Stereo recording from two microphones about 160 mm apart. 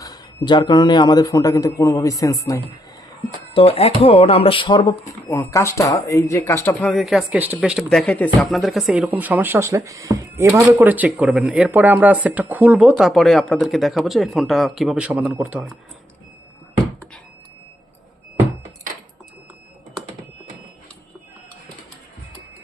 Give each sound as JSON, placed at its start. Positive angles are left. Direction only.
{"t": 0.0, "sound": "a man's voice", "side_deg": 25}
{"t": 3.5, "sound": "speech", "side_deg": 40}
{"t": 6.8, "sound": "speech", "side_deg": 0}